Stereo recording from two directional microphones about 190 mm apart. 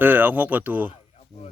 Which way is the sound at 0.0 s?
10° right (ahead or behind).